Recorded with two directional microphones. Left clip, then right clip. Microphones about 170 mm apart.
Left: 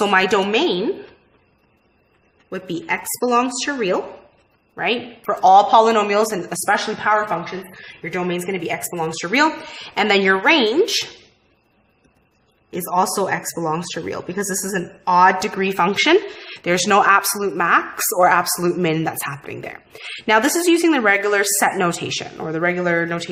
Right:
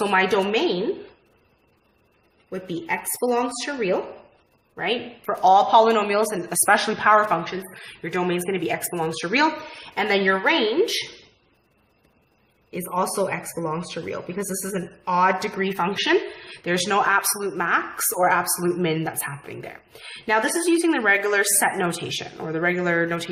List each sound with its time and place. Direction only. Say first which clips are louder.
0.0 s speech: left 4 dB; 30° left (ahead or behind)
2.5 s a woman's voice: left 4 dB; 30° left (ahead or behind)
5.3 s a man's voice: left 4 dB; 20° left (ahead or behind)
6.7 s speech: right 1 dB; 5° right (ahead or behind)
9.9 s speech: left 5 dB; 35° left (ahead or behind)
12.7 s speech: left 5 dB; 40° left (ahead or behind); by 23.3 s 20° left (ahead or behind)